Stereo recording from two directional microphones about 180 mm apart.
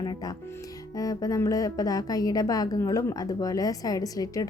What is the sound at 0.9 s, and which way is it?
A woman's voice, 20° left (ahead or behind).